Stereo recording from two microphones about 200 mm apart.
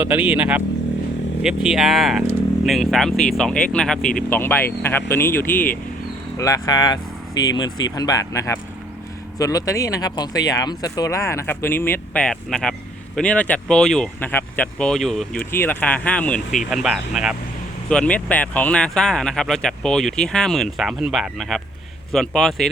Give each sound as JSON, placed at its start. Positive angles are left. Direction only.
{"t": 0.0, "sound": "speech", "side_deg": -10}